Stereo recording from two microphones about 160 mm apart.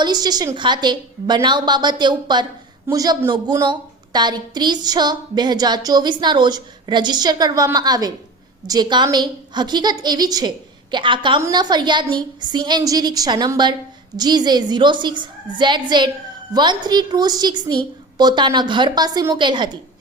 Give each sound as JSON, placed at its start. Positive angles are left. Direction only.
{"t": 0.0, "sound": "a woman's voice", "side_deg": -25}